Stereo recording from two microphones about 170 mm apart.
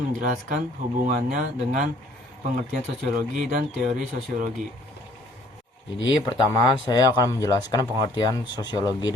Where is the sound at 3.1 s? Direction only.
55° right (ahead or behind).